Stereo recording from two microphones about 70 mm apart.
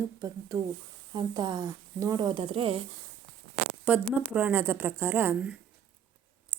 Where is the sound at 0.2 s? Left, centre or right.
Right.